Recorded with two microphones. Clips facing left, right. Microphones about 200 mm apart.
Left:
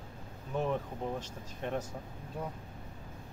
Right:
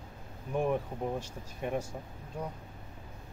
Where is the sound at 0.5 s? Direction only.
10° right (ahead or behind).